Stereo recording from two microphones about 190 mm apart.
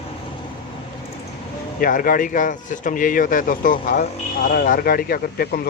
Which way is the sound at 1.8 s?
45° left (ahead or behind).